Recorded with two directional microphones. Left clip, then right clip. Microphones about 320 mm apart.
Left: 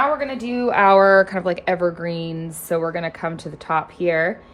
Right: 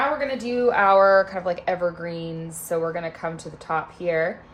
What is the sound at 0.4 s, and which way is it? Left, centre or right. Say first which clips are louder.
A woman's voice: left 3 dB; centre.